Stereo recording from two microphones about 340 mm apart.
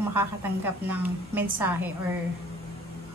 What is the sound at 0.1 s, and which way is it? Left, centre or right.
A woman's voice, centre.